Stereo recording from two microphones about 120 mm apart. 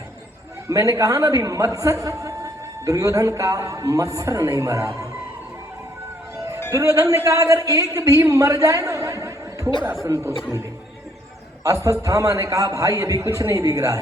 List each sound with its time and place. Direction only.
0.7 s a man's voice: 25° right (ahead or behind)
6.7 s a man's voice: 25° right (ahead or behind)
11.6 s a man's voice: 30° right (ahead or behind)